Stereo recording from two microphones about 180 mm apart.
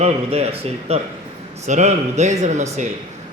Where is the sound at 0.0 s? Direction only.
35° right (ahead or behind).